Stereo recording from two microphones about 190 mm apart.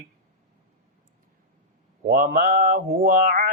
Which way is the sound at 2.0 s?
50° right (ahead or behind).